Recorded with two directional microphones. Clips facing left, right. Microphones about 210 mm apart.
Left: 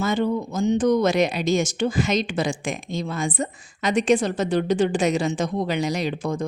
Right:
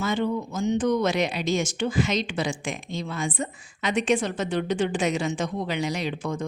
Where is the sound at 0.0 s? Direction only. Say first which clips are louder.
Left 3 dB; 40° left (ahead or behind).